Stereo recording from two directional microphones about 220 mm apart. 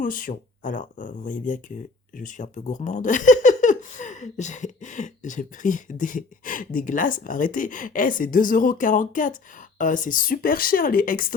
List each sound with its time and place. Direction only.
0.0 s speech: 40° left (ahead or behind)